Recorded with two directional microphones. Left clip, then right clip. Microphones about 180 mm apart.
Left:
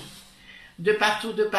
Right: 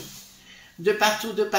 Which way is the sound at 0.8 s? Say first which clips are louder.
Even; 40° right (ahead or behind).